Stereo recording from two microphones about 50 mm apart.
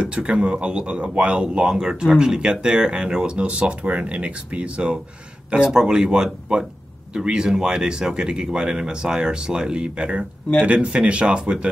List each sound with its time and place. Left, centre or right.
0.0 s speech: centre